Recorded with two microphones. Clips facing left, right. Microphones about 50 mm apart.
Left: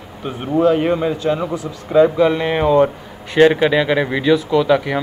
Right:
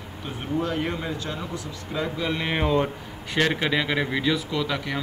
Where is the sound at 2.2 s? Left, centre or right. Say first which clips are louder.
Left 10 dB; centre.